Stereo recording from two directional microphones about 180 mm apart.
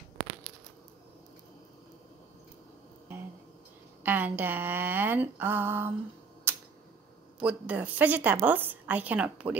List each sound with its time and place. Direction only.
4.0 s a woman's voice: 10° right (ahead or behind)
6.5 s a sound: 15° right (ahead or behind)
7.3 s a woman's voice: 5° right (ahead or behind)